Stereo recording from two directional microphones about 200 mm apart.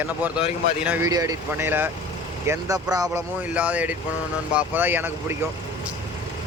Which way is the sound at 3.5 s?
5° right (ahead or behind).